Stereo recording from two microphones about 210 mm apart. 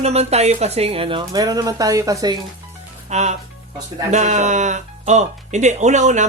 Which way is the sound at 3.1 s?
30° right (ahead or behind).